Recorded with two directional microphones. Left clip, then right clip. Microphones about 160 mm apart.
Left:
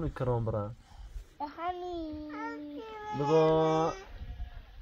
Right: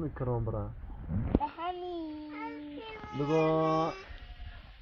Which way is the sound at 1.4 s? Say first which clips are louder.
Right 1 dB; 55° left (ahead or behind).